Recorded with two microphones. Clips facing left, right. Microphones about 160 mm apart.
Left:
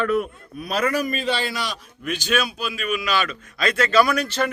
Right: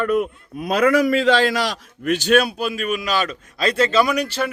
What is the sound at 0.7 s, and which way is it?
A man's voice, 65° right (ahead or behind).